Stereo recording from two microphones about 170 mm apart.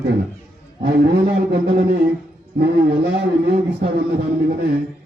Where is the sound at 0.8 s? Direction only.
70° right (ahead or behind).